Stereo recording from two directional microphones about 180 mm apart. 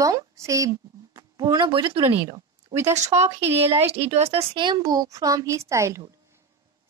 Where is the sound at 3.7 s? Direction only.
35° right (ahead or behind).